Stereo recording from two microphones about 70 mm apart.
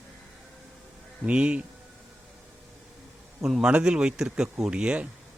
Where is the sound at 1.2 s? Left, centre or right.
Centre.